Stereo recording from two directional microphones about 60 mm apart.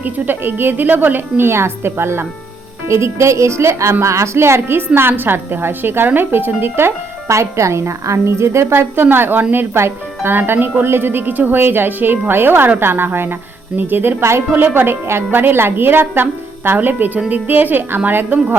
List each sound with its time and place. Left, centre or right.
0.0 s speech: right
14.5 s speech: right